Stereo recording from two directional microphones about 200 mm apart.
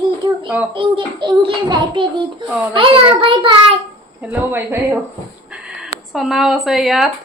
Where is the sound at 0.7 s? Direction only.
25° right (ahead or behind).